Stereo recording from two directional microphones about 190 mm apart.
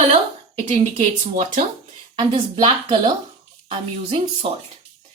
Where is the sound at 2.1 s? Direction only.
25° right (ahead or behind).